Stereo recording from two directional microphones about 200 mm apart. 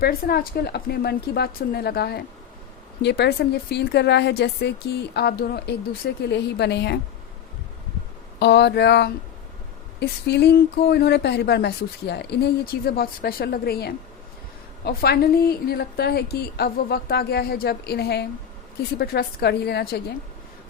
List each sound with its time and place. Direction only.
0.0 s a woman's voice: 50° left (ahead or behind)
8.4 s a woman's voice: 60° left (ahead or behind)